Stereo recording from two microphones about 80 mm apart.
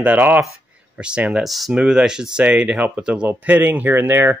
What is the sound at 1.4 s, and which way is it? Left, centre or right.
Speech, centre.